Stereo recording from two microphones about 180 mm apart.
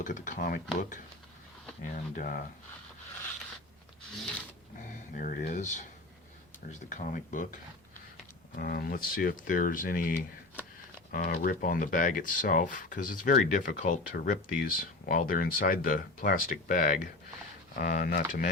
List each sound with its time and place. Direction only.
0.0 s speech: 45° left (ahead or behind)
5.1 s speech: 45° left (ahead or behind)